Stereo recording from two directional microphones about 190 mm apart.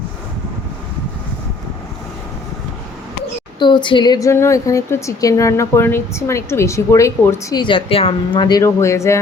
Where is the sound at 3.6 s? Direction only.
25° left (ahead or behind).